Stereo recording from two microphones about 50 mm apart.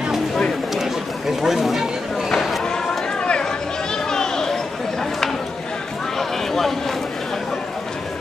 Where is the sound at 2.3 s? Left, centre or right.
Centre.